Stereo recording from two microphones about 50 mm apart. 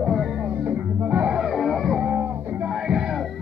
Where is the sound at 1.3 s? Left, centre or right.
Centre.